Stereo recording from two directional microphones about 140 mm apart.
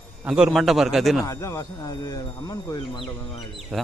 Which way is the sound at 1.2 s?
20° left (ahead or behind).